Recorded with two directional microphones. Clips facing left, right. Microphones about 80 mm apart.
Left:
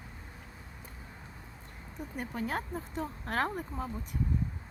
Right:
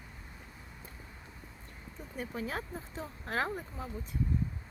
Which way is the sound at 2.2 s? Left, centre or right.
Left.